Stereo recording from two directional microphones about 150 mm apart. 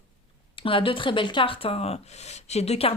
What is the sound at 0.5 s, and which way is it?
Speech, 35° left (ahead or behind).